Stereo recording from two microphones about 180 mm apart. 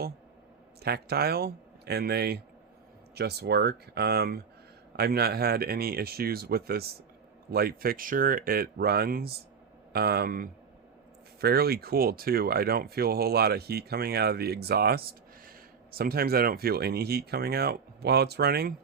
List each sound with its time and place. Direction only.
0.8 s speech: 60° right (ahead or behind)